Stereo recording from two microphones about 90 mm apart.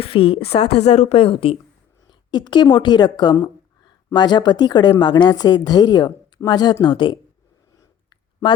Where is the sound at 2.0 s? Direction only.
55° left (ahead or behind).